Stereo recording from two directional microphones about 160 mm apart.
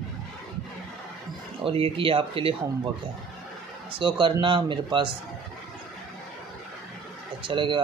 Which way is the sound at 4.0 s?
30° right (ahead or behind).